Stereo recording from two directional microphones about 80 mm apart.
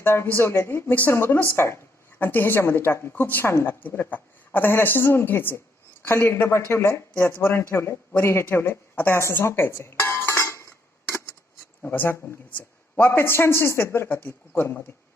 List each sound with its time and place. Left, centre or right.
0.0 s a woman's voice: left
2.1 s a woman's voice: left
9.2 s dishes: left
11.8 s a woman's voice: left